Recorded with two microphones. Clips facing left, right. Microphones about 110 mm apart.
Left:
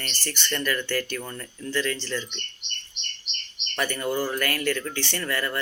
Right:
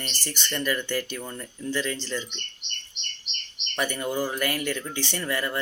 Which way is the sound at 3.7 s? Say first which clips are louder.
Left 1 dB; 15° right (ahead or behind).